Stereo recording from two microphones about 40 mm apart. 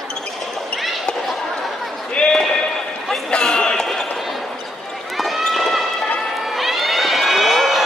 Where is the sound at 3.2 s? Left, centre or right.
Left.